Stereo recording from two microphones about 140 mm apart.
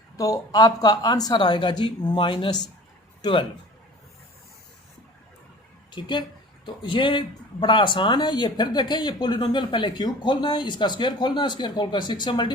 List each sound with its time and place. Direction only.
0.2 s a man's voice: 25° left (ahead or behind)
5.9 s speech: 35° left (ahead or behind)